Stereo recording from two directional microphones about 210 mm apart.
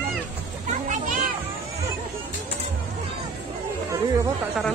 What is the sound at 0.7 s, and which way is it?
Children playing, 35° right (ahead or behind).